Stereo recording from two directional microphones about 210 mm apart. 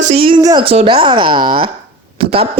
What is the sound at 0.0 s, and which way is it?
A man's voice, 30° right (ahead or behind).